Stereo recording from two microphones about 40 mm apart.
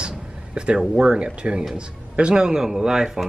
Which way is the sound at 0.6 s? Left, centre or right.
Right.